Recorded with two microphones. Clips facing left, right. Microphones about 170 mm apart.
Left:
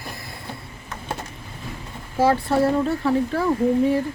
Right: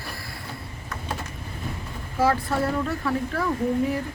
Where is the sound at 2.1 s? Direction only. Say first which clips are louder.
Left 4 dB; 30° left (ahead or behind).